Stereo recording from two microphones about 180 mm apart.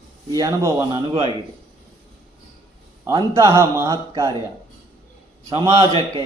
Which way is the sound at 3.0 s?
15° right (ahead or behind).